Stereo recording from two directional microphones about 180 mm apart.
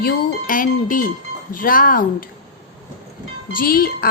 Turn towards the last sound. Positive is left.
turn(degrees=55)  # may be behind; listen again after turning